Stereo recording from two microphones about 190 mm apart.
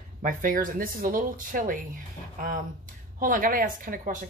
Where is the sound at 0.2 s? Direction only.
45° right (ahead or behind).